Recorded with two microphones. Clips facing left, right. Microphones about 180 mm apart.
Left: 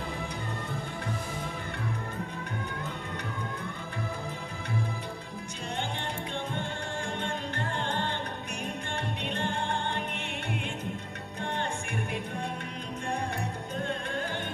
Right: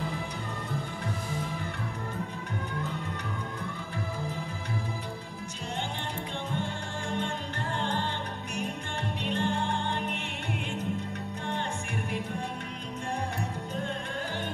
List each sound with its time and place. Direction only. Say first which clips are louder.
7.2 s music: left 1 dB; 55° left (ahead or behind)
9.3 s music: right 3 dB; 55° left (ahead or behind)